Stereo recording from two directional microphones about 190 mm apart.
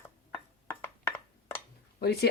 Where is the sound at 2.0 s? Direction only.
55° left (ahead or behind).